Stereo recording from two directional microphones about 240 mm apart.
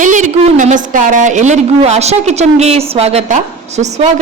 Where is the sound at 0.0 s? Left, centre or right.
Right.